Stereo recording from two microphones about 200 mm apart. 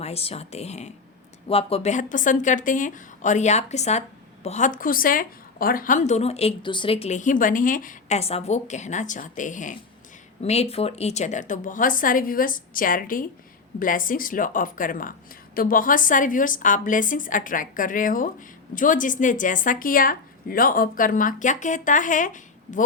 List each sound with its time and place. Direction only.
0.0 s a woman's voice: 30° left (ahead or behind)